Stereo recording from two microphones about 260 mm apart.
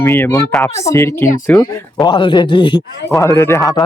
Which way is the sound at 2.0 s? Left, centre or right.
Centre.